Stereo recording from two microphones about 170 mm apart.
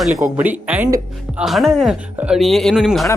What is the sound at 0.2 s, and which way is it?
Speech, 10° right (ahead or behind).